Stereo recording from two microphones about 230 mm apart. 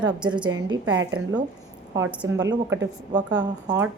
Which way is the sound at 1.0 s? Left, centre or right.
Right.